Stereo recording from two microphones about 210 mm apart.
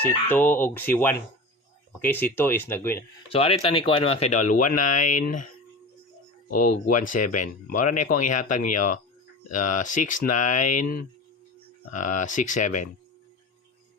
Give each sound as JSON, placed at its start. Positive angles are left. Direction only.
{"t": 0.0, "sound": "speech", "side_deg": 10}
{"t": 3.2, "sound": "speech", "side_deg": 25}
{"t": 6.5, "sound": "speech", "side_deg": 40}